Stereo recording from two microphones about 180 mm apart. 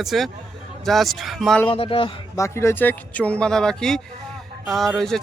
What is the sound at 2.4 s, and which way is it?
Speech, 15° left (ahead or behind).